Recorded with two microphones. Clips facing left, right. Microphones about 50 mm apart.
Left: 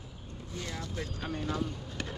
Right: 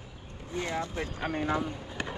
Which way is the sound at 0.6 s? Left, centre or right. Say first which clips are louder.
Right 7 dB; right.